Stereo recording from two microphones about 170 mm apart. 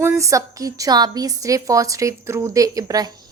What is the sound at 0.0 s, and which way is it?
A woman's voice, 20° right (ahead or behind).